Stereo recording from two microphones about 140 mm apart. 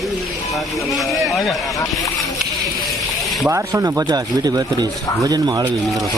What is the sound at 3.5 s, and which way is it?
Speech, 25° right (ahead or behind).